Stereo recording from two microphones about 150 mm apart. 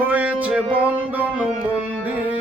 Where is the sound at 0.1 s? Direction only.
10° right (ahead or behind).